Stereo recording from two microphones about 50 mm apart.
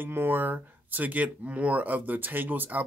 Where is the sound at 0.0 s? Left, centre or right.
Right.